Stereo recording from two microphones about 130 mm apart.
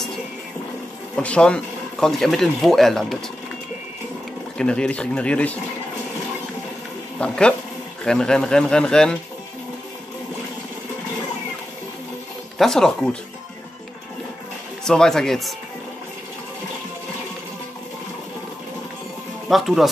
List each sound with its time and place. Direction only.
1.1 s speech: 10° left (ahead or behind)
4.6 s speech: 5° left (ahead or behind)
7.2 s speech: 10° left (ahead or behind)
12.5 s speech: 5° left (ahead or behind)
14.9 s speech: 5° left (ahead or behind)
19.5 s speech: centre (ahead or behind)